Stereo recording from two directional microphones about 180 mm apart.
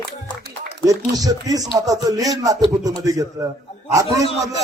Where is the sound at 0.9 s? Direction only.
20° right (ahead or behind).